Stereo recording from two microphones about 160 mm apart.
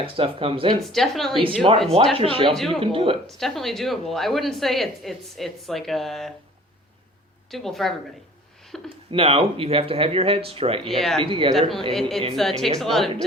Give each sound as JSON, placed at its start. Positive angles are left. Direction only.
{"t": 0.0, "sound": "speech", "side_deg": -35}
{"t": 0.8, "sound": "speech", "side_deg": 0}
{"t": 1.4, "sound": "speech", "side_deg": -35}
{"t": 2.5, "sound": "speech", "side_deg": 0}
{"t": 2.8, "sound": "speech", "side_deg": -35}
{"t": 3.2, "sound": "speech", "side_deg": 0}
{"t": 7.5, "sound": "speech", "side_deg": 0}
{"t": 9.1, "sound": "speech", "side_deg": -40}
{"t": 10.8, "sound": "speech", "side_deg": 0}
{"t": 11.2, "sound": "speech", "side_deg": -35}
{"t": 11.9, "sound": "speech", "side_deg": 0}